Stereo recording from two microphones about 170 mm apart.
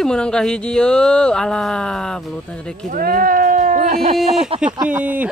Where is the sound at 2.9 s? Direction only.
55° right (ahead or behind).